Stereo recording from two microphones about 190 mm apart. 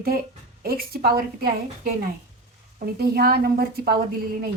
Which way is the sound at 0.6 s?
50° right (ahead or behind).